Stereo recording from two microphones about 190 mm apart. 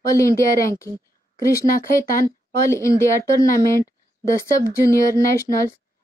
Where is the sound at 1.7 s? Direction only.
50° left (ahead or behind).